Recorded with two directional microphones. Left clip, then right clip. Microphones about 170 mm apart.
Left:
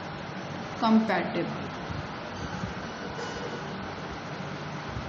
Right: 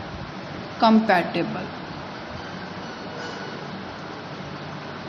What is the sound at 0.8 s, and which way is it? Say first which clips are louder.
Speech: right 8 dB; 45° right (ahead or behind).